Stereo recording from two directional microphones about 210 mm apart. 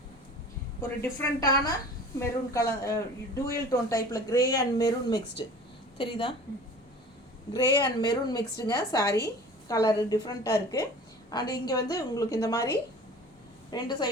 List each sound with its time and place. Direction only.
0.8 s a woman's voice: 15° left (ahead or behind)
7.5 s a woman's voice: 20° left (ahead or behind)
13.7 s a woman's voice: 20° left (ahead or behind)